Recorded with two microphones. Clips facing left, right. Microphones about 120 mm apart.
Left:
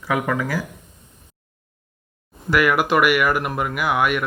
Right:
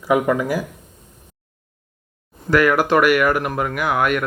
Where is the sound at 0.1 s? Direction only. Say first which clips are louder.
Right 5 dB; 20° right (ahead or behind).